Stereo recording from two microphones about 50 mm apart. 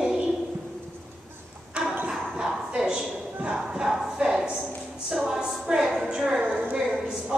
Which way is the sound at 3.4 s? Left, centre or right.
Centre.